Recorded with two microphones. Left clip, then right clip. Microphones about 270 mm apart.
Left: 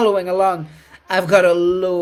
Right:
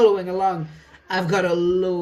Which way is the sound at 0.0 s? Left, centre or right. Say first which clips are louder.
Left 2 dB; left.